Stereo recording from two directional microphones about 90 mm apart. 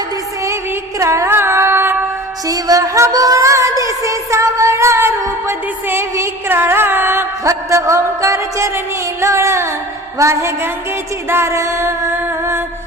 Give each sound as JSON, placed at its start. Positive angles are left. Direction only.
{"t": 0.4, "sound": "music", "side_deg": -35}
{"t": 2.5, "sound": "music", "side_deg": -40}